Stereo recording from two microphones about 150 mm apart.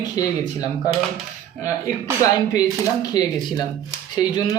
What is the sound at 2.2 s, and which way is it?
Speech, 25° left (ahead or behind).